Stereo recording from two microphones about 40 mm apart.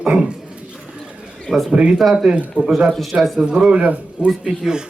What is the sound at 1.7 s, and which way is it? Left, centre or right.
Speech, right.